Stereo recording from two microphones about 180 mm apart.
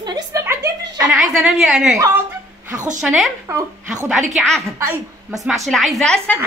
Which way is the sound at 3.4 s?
15° right (ahead or behind).